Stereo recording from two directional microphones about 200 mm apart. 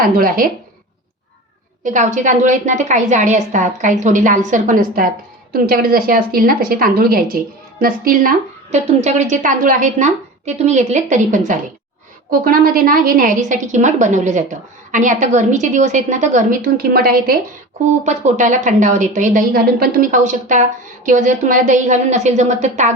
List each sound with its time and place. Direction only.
0.0 s a woman's voice: 45° right (ahead or behind)
1.8 s a woman's voice: 40° right (ahead or behind)
18.0 s a woman's voice: 35° right (ahead or behind)